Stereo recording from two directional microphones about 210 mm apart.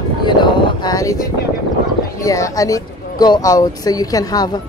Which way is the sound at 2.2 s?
15° left (ahead or behind).